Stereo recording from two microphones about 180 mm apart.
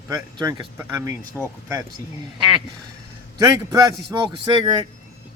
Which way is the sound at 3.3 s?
20° right (ahead or behind).